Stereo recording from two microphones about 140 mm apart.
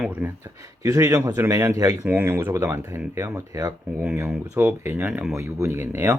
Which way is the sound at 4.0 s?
10° right (ahead or behind).